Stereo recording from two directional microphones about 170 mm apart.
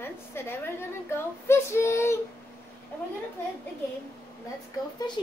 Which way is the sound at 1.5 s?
15° left (ahead or behind).